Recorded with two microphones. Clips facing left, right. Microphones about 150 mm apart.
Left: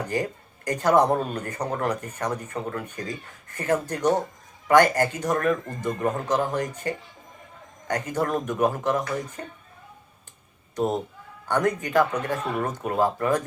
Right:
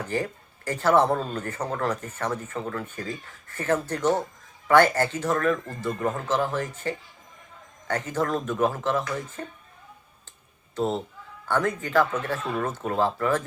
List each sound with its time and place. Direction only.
0.0 s speech: 15° left (ahead or behind)
10.8 s speech: 15° left (ahead or behind)